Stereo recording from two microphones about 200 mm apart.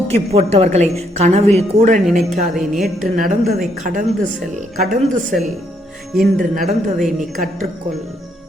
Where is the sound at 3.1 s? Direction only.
45° right (ahead or behind).